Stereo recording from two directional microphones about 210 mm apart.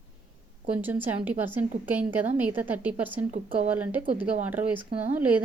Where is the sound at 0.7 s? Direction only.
10° right (ahead or behind).